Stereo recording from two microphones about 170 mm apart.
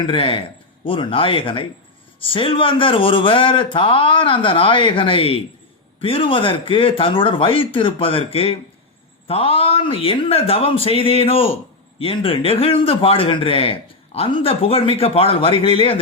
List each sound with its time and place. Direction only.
0.0 s a man's voice: 30° left (ahead or behind)